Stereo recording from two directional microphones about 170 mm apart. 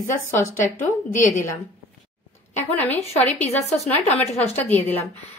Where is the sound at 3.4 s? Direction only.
40° left (ahead or behind).